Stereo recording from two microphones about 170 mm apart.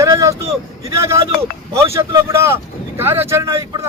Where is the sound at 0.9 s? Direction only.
15° right (ahead or behind).